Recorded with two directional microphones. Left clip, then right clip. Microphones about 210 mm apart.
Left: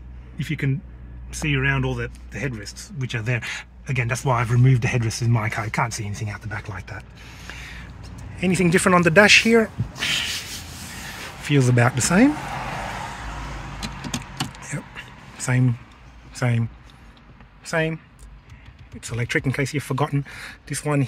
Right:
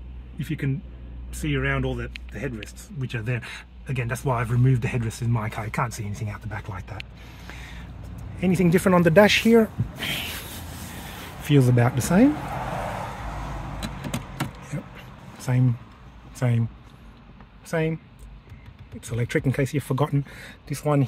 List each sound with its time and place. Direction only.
0.4 s speech: 20° left (ahead or behind); by 7.0 s 5° left (ahead or behind)
7.2 s a sound: 10° right (ahead or behind)
8.4 s speech: 5° right (ahead or behind); by 10.3 s 25° right (ahead or behind)
11.6 s speech: 5° right (ahead or behind)
12.5 s vehicle: 40° right (ahead or behind)
15.3 s a sound: 5° left (ahead or behind)
16.3 s speech: centre (ahead or behind)
17.6 s speech: centre (ahead or behind)
18.9 s speech: 10° right (ahead or behind)